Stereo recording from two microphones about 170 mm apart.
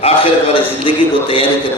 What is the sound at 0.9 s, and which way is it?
Speech, 30° left (ahead or behind).